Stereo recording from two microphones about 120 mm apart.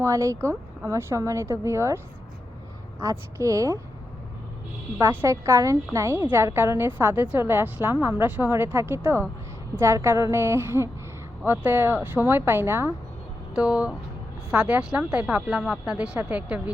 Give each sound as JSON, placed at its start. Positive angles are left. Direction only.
{"t": 0.0, "sound": "a woman's voice", "side_deg": -25}
{"t": 3.0, "sound": "a woman's voice", "side_deg": -25}
{"t": 4.9, "sound": "a woman's voice", "side_deg": -25}
{"t": 13.6, "sound": "speech", "side_deg": -10}